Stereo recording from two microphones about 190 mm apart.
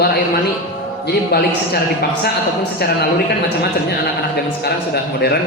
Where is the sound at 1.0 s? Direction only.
55° left (ahead or behind).